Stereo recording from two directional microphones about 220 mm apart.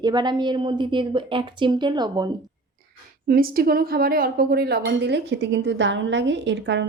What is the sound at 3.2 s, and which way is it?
Speech, 40° right (ahead or behind).